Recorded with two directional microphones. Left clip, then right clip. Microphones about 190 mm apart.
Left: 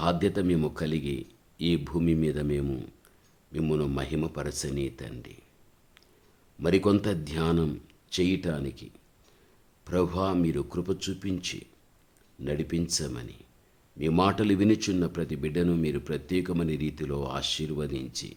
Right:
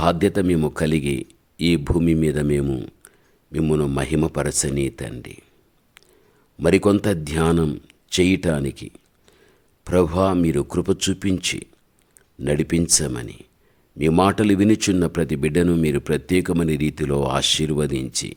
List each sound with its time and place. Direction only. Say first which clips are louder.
0.0 s speech: right 8 dB; 35° right (ahead or behind)
6.6 s speech: right 7 dB; 40° right (ahead or behind)